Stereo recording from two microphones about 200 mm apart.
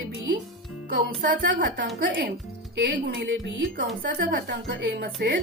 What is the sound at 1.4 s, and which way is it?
A woman's voice, 60° right (ahead or behind).